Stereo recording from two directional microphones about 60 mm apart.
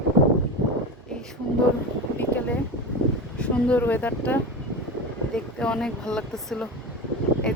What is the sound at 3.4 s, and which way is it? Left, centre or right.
Speech, centre.